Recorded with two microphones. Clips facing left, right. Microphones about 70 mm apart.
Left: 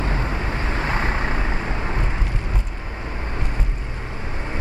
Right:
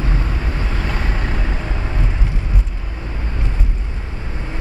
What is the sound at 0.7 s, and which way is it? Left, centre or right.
Vehicle, left.